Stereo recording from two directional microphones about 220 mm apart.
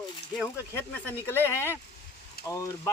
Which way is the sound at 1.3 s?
10° left (ahead or behind).